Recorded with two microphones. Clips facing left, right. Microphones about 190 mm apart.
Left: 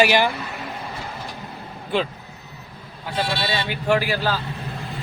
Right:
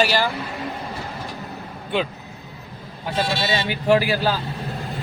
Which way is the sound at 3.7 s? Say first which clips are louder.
Right 3 dB; 15° right (ahead or behind).